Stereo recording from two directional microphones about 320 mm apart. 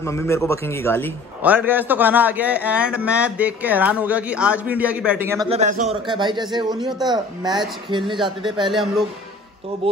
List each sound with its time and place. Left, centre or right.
0.0 s a man's voice: centre
1.4 s a man's voice: centre
5.5 s a man's voice: right
8.6 s a man's voice: centre